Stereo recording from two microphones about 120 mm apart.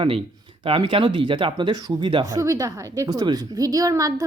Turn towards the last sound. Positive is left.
turn(degrees=-30)  # may be behind; listen again after turning